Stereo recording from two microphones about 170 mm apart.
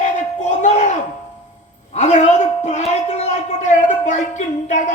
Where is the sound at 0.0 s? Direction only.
45° left (ahead or behind).